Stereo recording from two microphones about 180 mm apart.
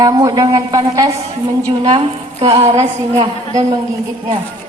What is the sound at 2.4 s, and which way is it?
Speech, 35° right (ahead or behind).